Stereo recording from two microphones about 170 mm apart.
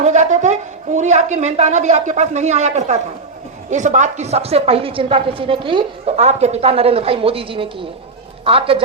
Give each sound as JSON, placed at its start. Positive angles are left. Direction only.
{"t": 0.0, "sound": "a woman's voice", "side_deg": -45}